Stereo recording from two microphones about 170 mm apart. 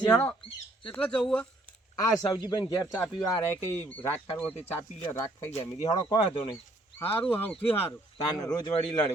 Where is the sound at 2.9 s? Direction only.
10° left (ahead or behind).